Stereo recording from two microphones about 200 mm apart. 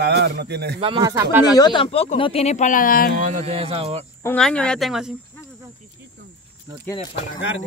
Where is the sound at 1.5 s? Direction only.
20° left (ahead or behind); by 3.1 s 45° left (ahead or behind).